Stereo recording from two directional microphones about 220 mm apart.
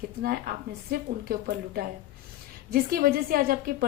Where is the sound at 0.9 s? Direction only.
45° right (ahead or behind).